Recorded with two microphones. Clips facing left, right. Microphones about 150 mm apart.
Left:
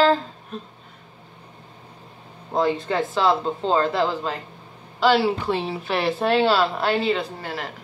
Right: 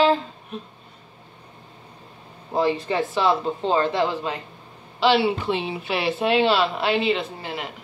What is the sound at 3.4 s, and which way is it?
Speech, 25° left (ahead or behind).